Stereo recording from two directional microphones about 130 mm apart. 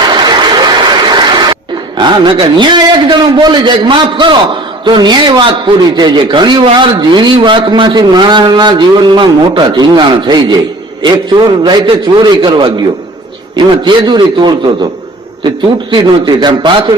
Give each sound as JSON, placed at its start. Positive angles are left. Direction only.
{"t": 0.0, "sound": "applause", "side_deg": -35}
{"t": 2.0, "sound": "a man's voice", "side_deg": -35}
{"t": 15.9, "sound": "a man's voice", "side_deg": -35}